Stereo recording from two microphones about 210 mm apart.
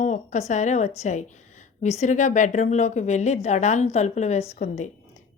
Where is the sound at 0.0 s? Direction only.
35° left (ahead or behind).